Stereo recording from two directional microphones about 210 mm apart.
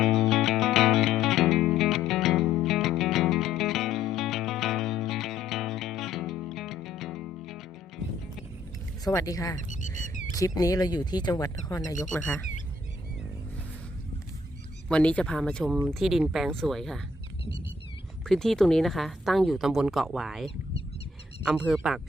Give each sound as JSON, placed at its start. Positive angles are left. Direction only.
{"t": 0.0, "sound": "music", "side_deg": 0}
{"t": 9.0, "sound": "speech", "side_deg": 15}
{"t": 9.6, "sound": "bird", "side_deg": 35}
{"t": 10.3, "sound": "speech", "side_deg": 15}
{"t": 12.1, "sound": "a woman's voice", "side_deg": 5}
{"t": 14.8, "sound": "a woman's voice", "side_deg": 5}
{"t": 18.3, "sound": "a woman's voice", "side_deg": 5}